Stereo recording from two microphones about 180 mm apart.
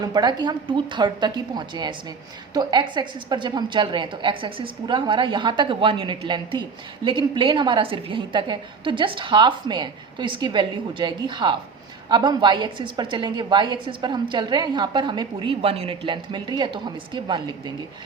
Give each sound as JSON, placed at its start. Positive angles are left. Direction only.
{"t": 0.0, "sound": "a woman's voice", "side_deg": -25}